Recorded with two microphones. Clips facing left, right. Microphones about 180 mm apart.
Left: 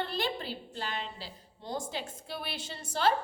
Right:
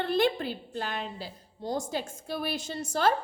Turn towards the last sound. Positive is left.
turn(degrees=-45)  # may be behind; listen again after turning